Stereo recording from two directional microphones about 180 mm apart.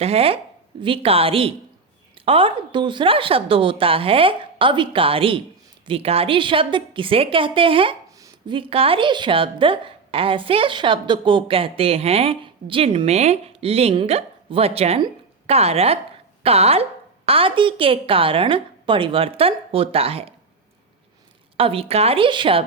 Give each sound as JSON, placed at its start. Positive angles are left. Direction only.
{"t": 0.0, "sound": "a woman's voice", "side_deg": -35}
{"t": 21.6, "sound": "a woman's voice", "side_deg": -30}